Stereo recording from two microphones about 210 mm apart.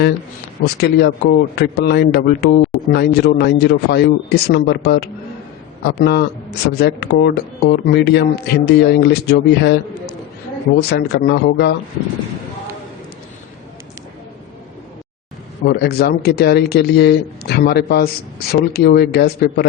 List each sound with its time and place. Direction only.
0.6 s a man's voice: 50° left (ahead or behind)
15.6 s a man's voice: 50° left (ahead or behind)